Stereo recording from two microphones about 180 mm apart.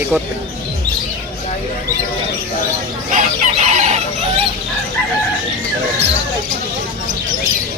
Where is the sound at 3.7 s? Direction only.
40° right (ahead or behind).